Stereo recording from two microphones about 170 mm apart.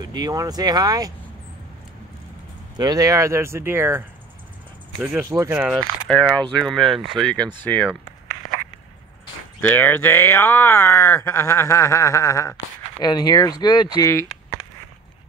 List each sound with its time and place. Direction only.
0.0 s speech: 25° right (ahead or behind)
2.8 s speech: 20° right (ahead or behind)
5.8 s speech: 5° left (ahead or behind)
8.4 s a sound: centre (ahead or behind)
9.6 s speech: 10° left (ahead or behind)